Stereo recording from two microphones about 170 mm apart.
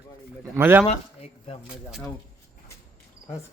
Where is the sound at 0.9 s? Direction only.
40° left (ahead or behind).